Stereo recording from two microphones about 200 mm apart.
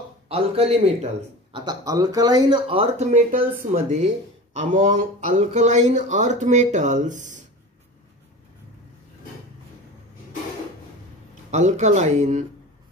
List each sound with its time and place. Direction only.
0.3 s speech: 30° right (ahead or behind)
3.1 s speech: 40° right (ahead or behind)
11.5 s speech: 35° right (ahead or behind)